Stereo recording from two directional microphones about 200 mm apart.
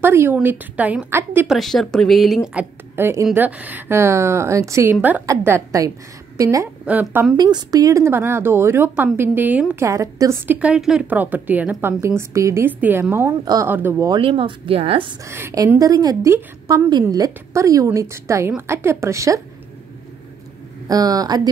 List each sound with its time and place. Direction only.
0.0 s speech: 10° right (ahead or behind)
1.6 s a woman's voice: centre (ahead or behind); by 15.1 s 25° right (ahead or behind)
15.2 s speech: 15° right (ahead or behind)
20.9 s speech: 20° right (ahead or behind)